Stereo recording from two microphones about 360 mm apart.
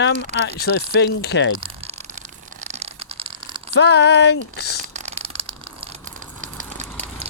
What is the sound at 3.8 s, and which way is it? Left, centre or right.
Speech, left.